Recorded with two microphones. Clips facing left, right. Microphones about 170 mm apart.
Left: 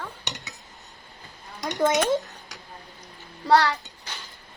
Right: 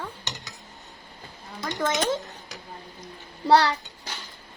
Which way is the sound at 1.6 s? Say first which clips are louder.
Left 4 dB; 15° left (ahead or behind).